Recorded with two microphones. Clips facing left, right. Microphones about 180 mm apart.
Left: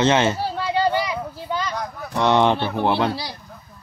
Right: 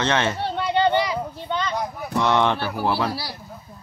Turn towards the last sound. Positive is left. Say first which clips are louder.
# left 3 dB
turn(degrees=20)  # may be behind; listen again after turning